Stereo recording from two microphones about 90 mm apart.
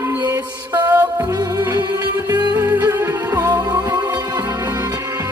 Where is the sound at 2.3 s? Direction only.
50° right (ahead or behind).